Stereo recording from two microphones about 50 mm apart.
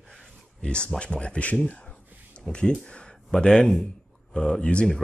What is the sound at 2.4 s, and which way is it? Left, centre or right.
Speech, centre.